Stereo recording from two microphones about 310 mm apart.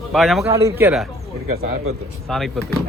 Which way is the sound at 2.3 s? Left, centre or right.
Centre.